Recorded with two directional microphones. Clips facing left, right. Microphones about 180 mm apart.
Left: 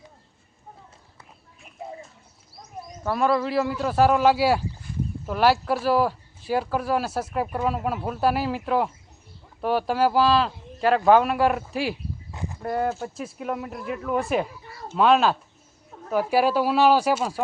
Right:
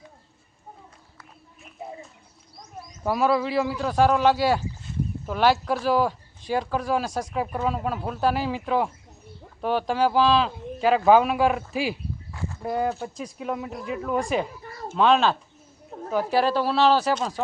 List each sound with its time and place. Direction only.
3.0 s speech: 10° right (ahead or behind)
3.2 s speech: centre (ahead or behind)
12.3 s a sound: 20° left (ahead or behind)
12.6 s speech: centre (ahead or behind)